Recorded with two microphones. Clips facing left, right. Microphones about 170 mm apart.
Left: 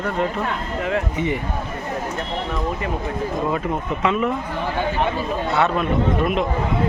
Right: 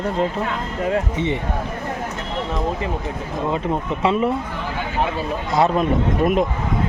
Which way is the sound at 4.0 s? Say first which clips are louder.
Right 2 dB; 35° right (ahead or behind).